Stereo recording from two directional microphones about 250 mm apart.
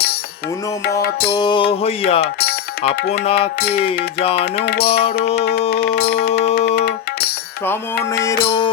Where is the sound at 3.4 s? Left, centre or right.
Left.